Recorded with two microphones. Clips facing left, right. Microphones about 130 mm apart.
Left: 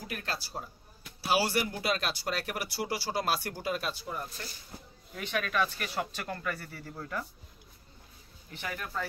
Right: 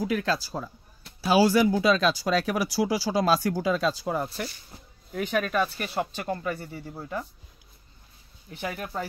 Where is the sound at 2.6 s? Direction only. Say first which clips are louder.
Right 9 dB; 90° right.